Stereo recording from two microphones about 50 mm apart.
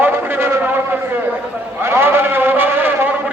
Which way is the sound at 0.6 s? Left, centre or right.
Right.